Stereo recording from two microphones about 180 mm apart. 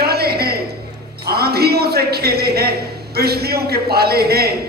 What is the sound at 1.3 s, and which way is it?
A man's voice, 60° right (ahead or behind).